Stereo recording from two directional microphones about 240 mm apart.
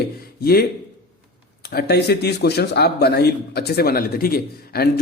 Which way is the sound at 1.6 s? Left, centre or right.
Left.